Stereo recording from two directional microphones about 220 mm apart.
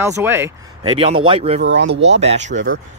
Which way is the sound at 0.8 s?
25° right (ahead or behind).